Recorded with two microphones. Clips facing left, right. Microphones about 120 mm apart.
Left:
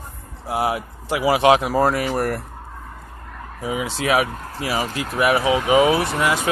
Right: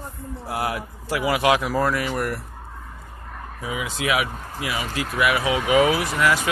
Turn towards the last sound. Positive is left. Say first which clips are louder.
# left 1 dB
turn(degrees=30)  # may be behind; listen again after turning